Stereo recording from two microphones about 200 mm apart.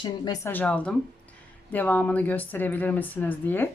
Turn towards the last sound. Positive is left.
turn(degrees=10)  # may be behind; listen again after turning